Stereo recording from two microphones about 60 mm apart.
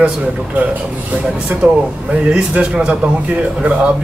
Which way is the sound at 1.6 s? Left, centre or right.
Centre.